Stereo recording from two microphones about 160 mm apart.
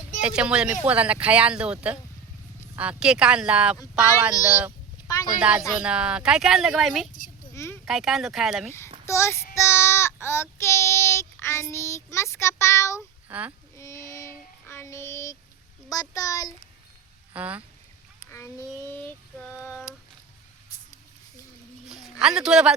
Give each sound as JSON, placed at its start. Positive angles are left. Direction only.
{"t": 0.2, "sound": "speech", "side_deg": -5}
{"t": 7.5, "sound": "a sound", "side_deg": 15}
{"t": 7.9, "sound": "speech", "side_deg": -5}
{"t": 9.0, "sound": "a sound", "side_deg": 15}
{"t": 9.6, "sound": "child singing", "side_deg": 15}
{"t": 13.2, "sound": "speech", "side_deg": -10}
{"t": 13.7, "sound": "child singing", "side_deg": 20}
{"t": 15.9, "sound": "a child's voice", "side_deg": 20}
{"t": 17.3, "sound": "speech", "side_deg": -10}
{"t": 18.3, "sound": "a sound", "side_deg": 15}
{"t": 21.8, "sound": "a sound", "side_deg": -5}
{"t": 22.2, "sound": "speech", "side_deg": -5}